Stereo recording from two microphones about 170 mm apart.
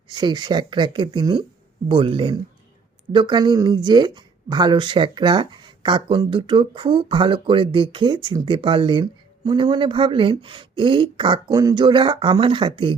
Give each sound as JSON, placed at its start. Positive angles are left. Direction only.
{"t": 0.1, "sound": "speech", "side_deg": -25}